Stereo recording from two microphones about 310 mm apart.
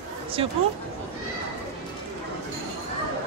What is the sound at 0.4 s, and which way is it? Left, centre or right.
Speech, centre.